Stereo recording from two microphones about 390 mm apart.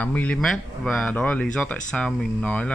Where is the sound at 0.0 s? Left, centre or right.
Centre.